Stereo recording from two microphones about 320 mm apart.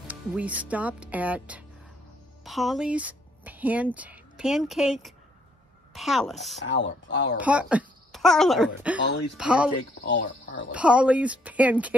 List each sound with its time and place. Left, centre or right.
0.0 s speech: centre
6.6 s speech: left
7.3 s a child's voice: centre
10.0 s speech: left
10.7 s speech: centre